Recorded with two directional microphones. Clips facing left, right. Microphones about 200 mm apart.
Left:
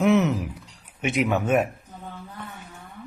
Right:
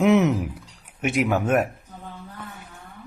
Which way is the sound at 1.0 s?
5° right (ahead or behind).